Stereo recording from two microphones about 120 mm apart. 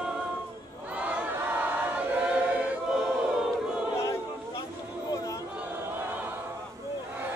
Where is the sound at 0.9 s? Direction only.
10° right (ahead or behind).